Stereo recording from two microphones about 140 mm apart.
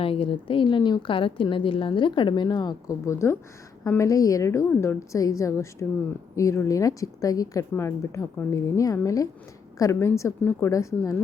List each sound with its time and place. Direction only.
0.0 s a woman's voice: 40° left (ahead or behind); by 11.2 s 20° left (ahead or behind)